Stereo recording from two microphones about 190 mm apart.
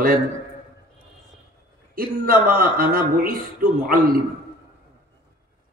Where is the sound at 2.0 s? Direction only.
50° right (ahead or behind).